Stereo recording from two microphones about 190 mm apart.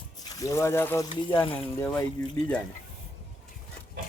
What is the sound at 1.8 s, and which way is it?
Speech, 15° left (ahead or behind).